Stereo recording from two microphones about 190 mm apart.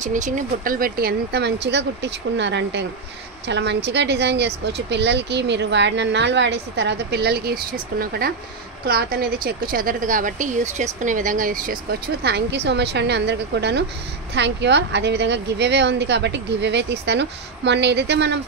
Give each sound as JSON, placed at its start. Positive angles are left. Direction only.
{"t": 0.0, "sound": "speech", "side_deg": -40}